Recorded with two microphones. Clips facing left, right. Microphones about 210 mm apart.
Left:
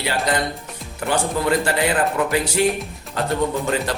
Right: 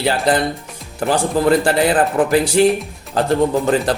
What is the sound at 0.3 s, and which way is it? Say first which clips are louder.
Speech: right 6 dB; 30° right (ahead or behind).